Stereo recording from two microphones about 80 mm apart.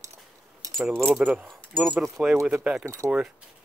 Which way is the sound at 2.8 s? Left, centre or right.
Right.